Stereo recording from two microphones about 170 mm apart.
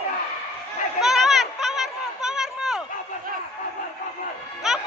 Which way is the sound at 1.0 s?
Centre (ahead or behind).